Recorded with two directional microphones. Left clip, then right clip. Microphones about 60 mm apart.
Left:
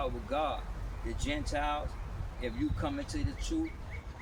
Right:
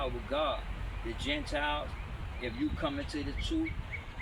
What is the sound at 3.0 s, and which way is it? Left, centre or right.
Speech, left.